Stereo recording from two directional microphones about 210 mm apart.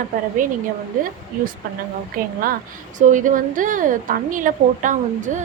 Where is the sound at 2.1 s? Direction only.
40° right (ahead or behind).